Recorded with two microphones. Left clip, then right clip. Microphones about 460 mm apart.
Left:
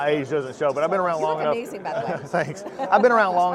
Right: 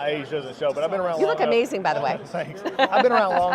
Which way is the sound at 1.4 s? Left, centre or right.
Right.